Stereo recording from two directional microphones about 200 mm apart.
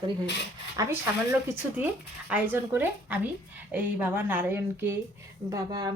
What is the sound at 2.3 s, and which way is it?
Speech, 10° right (ahead or behind).